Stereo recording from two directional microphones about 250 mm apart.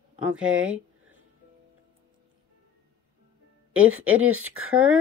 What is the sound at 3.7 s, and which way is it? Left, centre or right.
Speech, right.